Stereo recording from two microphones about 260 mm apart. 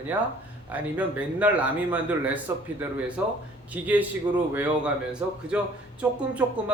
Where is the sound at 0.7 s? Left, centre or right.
Centre.